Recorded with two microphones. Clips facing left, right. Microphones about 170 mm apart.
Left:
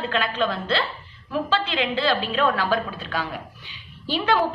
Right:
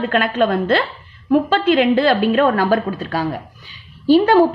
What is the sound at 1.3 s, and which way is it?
A woman's voice, 50° right (ahead or behind).